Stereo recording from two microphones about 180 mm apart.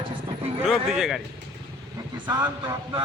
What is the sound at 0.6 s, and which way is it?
Speech, 5° right (ahead or behind).